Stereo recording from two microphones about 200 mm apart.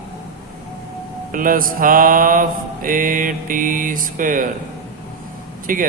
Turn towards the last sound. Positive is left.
turn(degrees=-45)  # may be behind; listen again after turning